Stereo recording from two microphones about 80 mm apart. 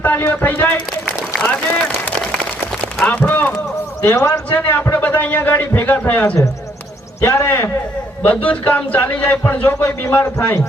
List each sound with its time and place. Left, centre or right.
0.0 s a man's voice: left
3.0 s a man's voice: centre
4.5 s a man's voice: left
7.2 s a man's voice: left
8.2 s a man's voice: centre